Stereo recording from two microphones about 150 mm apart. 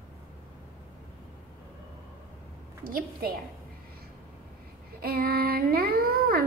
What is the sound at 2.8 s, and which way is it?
Speech, 70° right (ahead or behind).